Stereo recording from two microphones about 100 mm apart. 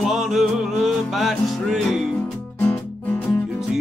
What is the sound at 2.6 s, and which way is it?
Music, 20° left (ahead or behind).